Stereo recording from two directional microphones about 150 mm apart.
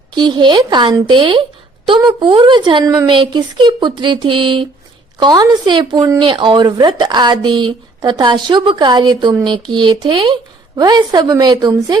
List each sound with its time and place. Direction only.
0.1 s speech: 30° right (ahead or behind)